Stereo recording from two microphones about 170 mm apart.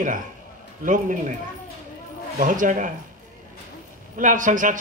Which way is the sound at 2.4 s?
50° right (ahead or behind).